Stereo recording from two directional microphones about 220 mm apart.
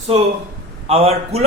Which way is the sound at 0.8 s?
25° right (ahead or behind).